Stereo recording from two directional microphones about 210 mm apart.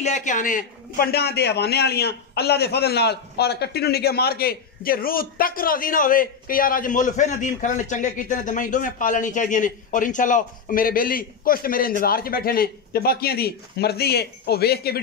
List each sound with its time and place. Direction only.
0.0 s a man's voice: 35° left (ahead or behind)